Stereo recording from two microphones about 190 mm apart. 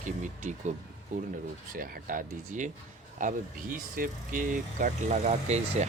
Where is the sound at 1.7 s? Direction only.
45° right (ahead or behind).